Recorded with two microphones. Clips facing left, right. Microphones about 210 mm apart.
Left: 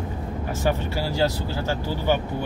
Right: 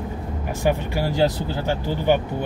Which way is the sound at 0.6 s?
15° right (ahead or behind).